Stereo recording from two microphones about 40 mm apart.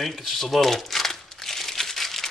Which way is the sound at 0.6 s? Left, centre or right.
Centre.